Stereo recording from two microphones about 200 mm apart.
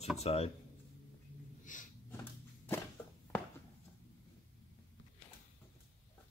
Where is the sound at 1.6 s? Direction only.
40° left (ahead or behind).